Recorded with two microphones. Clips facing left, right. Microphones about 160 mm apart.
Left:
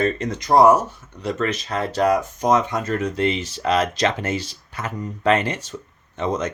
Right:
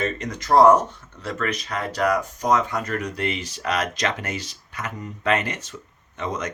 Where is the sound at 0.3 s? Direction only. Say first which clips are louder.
Even; 15° left (ahead or behind).